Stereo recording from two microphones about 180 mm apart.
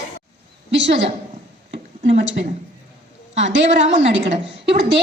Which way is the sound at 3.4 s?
85° right.